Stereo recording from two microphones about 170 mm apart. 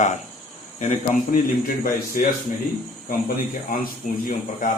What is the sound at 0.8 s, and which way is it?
A man's voice, 50° left (ahead or behind).